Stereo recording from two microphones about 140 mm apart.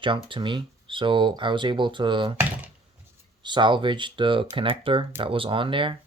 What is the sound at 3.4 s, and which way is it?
Speech, 35° right (ahead or behind).